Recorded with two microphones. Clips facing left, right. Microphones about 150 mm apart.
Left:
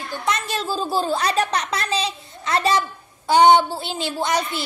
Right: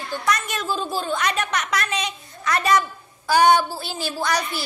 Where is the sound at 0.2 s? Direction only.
25° left (ahead or behind).